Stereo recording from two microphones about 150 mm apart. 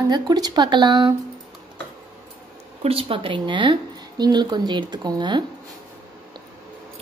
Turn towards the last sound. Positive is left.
turn(degrees=-30)  # may be behind; listen again after turning